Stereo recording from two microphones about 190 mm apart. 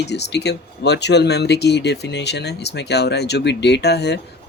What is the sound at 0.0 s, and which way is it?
Speech, 65° left (ahead or behind).